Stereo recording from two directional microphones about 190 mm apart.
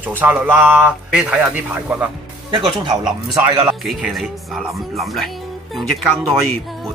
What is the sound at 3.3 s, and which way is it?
Speech, 10° right (ahead or behind).